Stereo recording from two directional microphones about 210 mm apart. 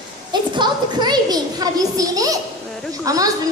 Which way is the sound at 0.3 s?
20° right (ahead or behind).